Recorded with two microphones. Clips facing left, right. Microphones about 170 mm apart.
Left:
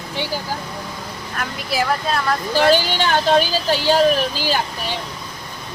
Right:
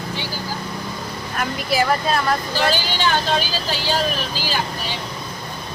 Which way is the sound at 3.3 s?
50° left (ahead or behind).